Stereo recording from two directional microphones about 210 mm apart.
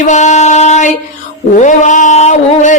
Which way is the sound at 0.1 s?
35° left (ahead or behind).